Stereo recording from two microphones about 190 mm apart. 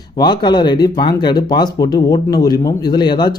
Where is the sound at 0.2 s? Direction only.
20° left (ahead or behind).